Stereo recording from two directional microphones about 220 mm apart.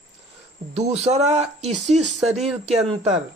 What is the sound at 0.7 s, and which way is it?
Speech, 30° right (ahead or behind).